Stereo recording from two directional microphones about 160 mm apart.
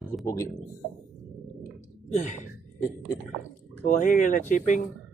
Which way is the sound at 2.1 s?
50° left (ahead or behind).